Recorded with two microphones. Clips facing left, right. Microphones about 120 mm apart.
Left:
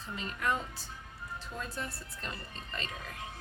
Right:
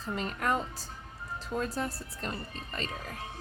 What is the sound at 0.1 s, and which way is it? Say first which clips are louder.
A woman's voice: right 4 dB; 45° right (ahead or behind).